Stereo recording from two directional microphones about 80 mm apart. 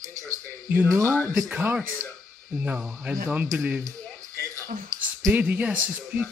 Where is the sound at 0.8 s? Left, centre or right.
Right.